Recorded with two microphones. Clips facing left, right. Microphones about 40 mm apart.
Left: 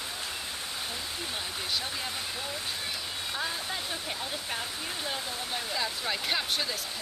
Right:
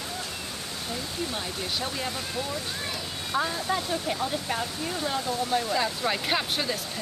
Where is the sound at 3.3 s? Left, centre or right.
Centre.